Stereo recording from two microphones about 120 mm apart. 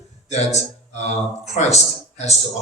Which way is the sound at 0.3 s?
65° left (ahead or behind).